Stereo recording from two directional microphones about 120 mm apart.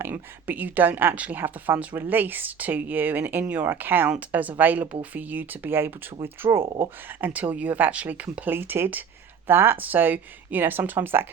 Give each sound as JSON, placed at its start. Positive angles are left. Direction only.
{"t": 0.0, "sound": "a woman's voice", "side_deg": -15}